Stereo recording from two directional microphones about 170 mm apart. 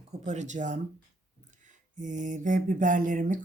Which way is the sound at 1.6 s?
45° right (ahead or behind).